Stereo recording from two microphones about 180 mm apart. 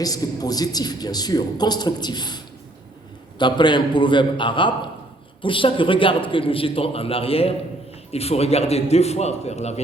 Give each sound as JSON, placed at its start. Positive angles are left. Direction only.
{"t": 0.0, "sound": "a man's voice", "side_deg": 20}